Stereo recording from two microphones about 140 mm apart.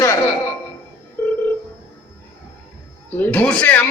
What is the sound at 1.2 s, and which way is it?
Telephone, 15° left (ahead or behind).